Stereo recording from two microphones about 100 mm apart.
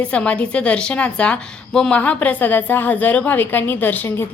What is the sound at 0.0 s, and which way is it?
A woman's voice, 10° left (ahead or behind).